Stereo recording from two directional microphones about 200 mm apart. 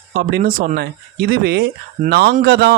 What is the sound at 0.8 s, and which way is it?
Speech, 50° right (ahead or behind).